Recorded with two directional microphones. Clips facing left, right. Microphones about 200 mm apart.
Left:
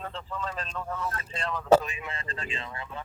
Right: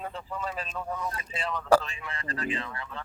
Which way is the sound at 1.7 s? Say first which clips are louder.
Left 2 dB; 20° left (ahead or behind).